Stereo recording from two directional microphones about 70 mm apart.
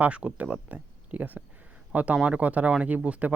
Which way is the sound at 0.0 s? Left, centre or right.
Centre.